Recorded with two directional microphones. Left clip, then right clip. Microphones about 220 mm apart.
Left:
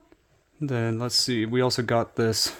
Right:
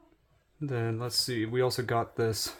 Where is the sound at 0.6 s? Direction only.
45° left (ahead or behind).